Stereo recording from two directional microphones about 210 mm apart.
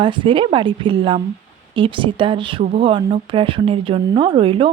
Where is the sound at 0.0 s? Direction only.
25° right (ahead or behind).